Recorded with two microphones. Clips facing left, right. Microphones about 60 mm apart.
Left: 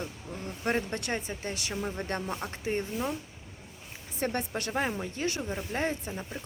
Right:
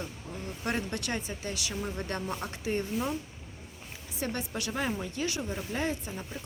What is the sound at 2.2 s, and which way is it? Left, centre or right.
Speech, centre.